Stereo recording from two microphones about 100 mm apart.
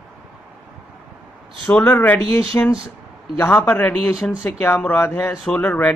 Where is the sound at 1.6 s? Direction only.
15° left (ahead or behind).